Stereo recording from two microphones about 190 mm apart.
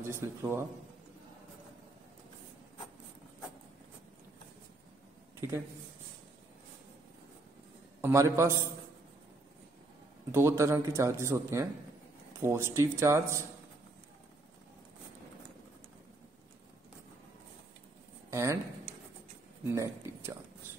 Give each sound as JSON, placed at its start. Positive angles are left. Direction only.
{"t": 0.0, "sound": "speech", "side_deg": -15}
{"t": 8.0, "sound": "speech", "side_deg": -15}
{"t": 10.3, "sound": "speech", "side_deg": -15}
{"t": 18.3, "sound": "speech", "side_deg": -15}
{"t": 19.6, "sound": "speech", "side_deg": -15}